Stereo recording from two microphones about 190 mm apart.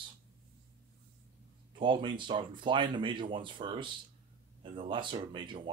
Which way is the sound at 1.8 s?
25° right (ahead or behind).